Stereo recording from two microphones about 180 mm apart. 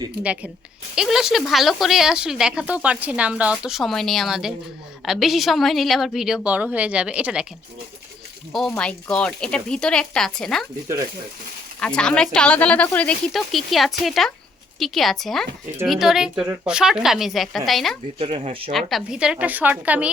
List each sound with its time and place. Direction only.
0.2 s speech: 5° right (ahead or behind)
8.7 s speech: 5° left (ahead or behind)
10.8 s speech: 20° right (ahead or behind)
11.8 s speech: 5° left (ahead or behind)
18.2 s speech: 30° right (ahead or behind)
18.7 s speech: centre (ahead or behind)